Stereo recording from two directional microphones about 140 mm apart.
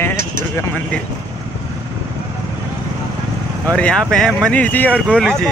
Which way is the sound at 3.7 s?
5° left (ahead or behind).